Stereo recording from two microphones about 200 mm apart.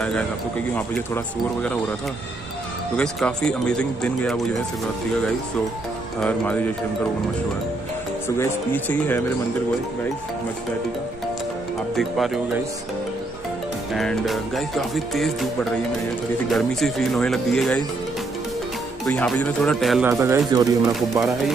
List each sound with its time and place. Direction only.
0.7 s speech: 10° left (ahead or behind)
3.0 s music: 5° left (ahead or behind)
6.2 s speech: 5° left (ahead or behind)
8.4 s speech: 10° left (ahead or behind)
11.9 s music: centre (ahead or behind)
13.9 s music: centre (ahead or behind)
16.5 s music: centre (ahead or behind)
19.0 s music: 5° left (ahead or behind)
20.1 s speech: 15° right (ahead or behind)